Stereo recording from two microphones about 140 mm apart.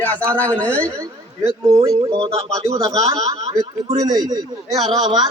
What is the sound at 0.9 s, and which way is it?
A man's voice, 20° right (ahead or behind).